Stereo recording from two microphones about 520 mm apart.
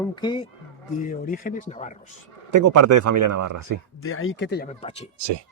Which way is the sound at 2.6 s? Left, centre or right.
Right.